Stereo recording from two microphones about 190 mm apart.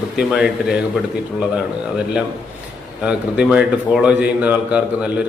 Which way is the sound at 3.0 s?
5° right (ahead or behind).